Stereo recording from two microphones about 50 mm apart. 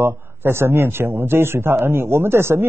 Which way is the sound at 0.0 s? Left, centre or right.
Right.